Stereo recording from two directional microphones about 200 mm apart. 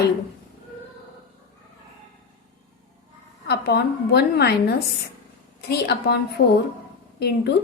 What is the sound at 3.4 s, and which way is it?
A woman's voice, 55° left (ahead or behind).